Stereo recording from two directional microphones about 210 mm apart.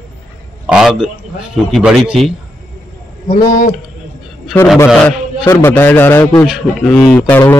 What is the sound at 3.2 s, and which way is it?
Speech, 40° left (ahead or behind).